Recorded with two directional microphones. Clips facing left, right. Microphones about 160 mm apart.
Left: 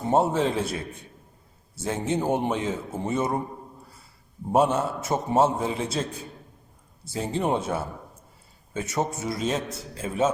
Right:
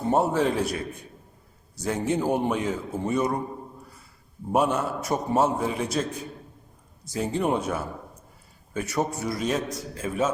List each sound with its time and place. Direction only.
0.1 s a man's voice: 25° left (ahead or behind)
4.5 s a man's voice: 25° left (ahead or behind)
7.0 s a man's voice: 30° left (ahead or behind)